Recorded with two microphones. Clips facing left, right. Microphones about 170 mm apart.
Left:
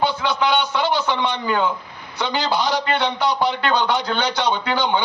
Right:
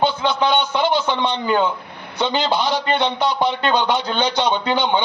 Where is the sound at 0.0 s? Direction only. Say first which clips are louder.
Right 2 dB; 20° right (ahead or behind).